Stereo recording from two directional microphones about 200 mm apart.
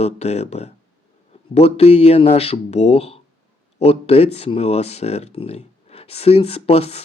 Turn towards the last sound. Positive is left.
turn(degrees=30)  # may be behind; listen again after turning